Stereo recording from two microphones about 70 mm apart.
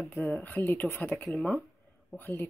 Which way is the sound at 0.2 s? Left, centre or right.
Left.